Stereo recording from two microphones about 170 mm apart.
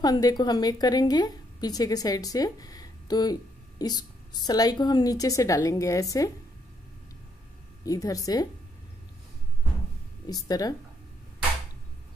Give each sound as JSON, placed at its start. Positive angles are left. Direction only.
{"t": 0.0, "sound": "a woman's voice", "side_deg": 25}
{"t": 7.8, "sound": "a woman's voice", "side_deg": 20}
{"t": 10.2, "sound": "a woman's voice", "side_deg": 20}